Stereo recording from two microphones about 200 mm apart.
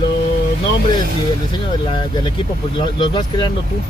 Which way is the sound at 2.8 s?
25° left (ahead or behind).